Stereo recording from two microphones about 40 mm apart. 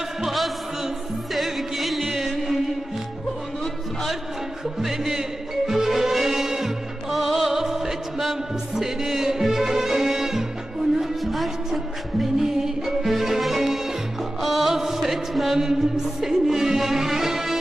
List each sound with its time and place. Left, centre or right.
0.2 s music: centre
4.8 s music: centre